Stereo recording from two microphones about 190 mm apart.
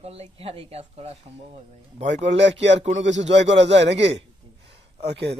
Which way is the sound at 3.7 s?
65° right (ahead or behind).